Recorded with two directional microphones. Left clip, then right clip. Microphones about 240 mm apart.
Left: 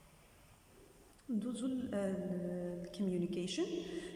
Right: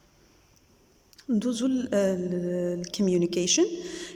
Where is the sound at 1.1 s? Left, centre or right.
Right.